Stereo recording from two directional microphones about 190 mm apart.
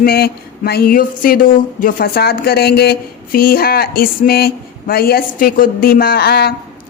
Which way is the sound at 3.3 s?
50° left (ahead or behind).